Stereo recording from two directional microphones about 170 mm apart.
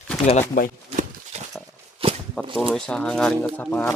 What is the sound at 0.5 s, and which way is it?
Speech, 50° left (ahead or behind).